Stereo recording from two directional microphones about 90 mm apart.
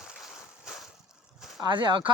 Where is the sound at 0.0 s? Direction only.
Centre (ahead or behind).